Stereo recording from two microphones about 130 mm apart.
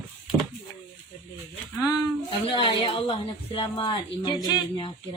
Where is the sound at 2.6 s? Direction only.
40° left (ahead or behind).